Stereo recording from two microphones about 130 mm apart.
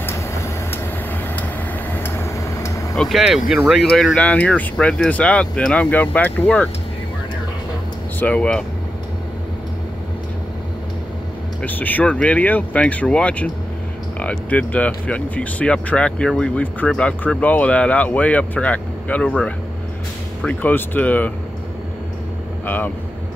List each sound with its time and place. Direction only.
0.0 s vehicle: 20° left (ahead or behind)
1.9 s vehicle: 15° left (ahead or behind)
3.0 s speech: centre (ahead or behind)
8.2 s speech: 10° left (ahead or behind)
11.6 s speech: 15° left (ahead or behind)